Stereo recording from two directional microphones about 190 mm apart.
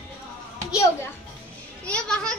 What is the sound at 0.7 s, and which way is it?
Children playing, 20° left (ahead or behind).